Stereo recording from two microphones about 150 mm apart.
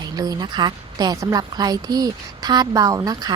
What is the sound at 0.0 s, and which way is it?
A woman's voice, 25° right (ahead or behind).